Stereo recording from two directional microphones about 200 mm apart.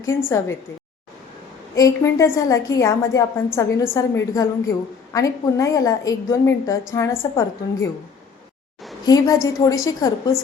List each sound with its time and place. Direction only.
0.3 s a woman's voice: 15° left (ahead or behind)
1.7 s a woman's voice: 15° left (ahead or behind)
9.0 s a woman's voice: 20° left (ahead or behind)